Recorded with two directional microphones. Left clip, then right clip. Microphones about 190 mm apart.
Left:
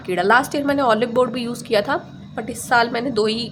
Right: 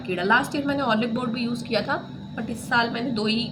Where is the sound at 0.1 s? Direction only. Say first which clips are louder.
Left 5 dB; 45° left (ahead or behind).